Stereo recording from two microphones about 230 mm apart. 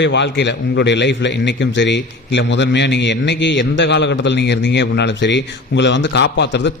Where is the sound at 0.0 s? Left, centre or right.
Left.